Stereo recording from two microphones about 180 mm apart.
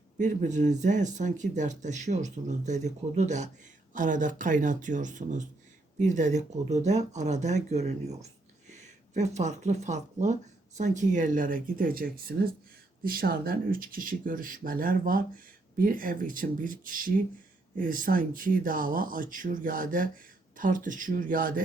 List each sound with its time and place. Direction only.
0.2 s speech: 40° right (ahead or behind)